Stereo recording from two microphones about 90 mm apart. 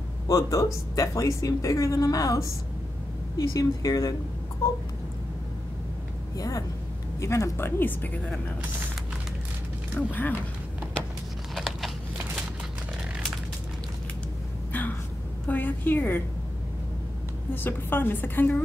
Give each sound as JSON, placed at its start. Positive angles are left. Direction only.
{"t": 0.3, "sound": "speech", "side_deg": 35}
{"t": 6.3, "sound": "speech", "side_deg": 40}
{"t": 9.9, "sound": "speech", "side_deg": 20}
{"t": 11.5, "sound": "a sound", "side_deg": 0}
{"t": 15.4, "sound": "speech", "side_deg": 20}
{"t": 17.6, "sound": "speech", "side_deg": 25}